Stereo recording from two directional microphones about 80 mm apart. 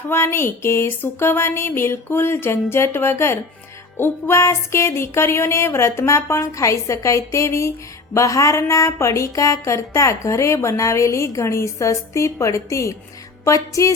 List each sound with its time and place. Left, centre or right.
0.1 s speech: left